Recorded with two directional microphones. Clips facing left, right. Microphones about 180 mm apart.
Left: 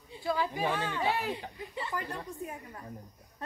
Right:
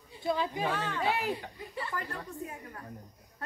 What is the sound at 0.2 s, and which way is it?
Speech, 25° right (ahead or behind).